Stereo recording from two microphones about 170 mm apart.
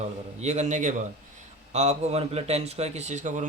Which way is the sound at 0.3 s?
40° right (ahead or behind).